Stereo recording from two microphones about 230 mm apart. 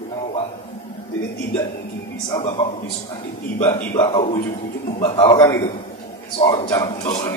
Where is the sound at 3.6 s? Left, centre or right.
Centre.